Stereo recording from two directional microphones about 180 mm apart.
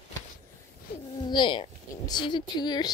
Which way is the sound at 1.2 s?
25° left (ahead or behind).